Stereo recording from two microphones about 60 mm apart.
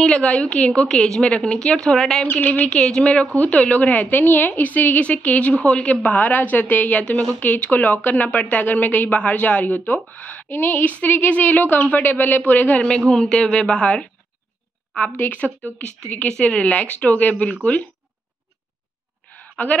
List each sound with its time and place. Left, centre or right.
0.0 s speech: centre
0.8 s speech: centre
1.9 s speech: centre
2.4 s speech: left
2.7 s a woman's voice: centre
10.5 s speech: left
10.8 s a woman's voice: left
13.1 s speech: centre
15.1 s a woman's voice: left
16.3 s a woman's voice: centre
19.3 s a sound: left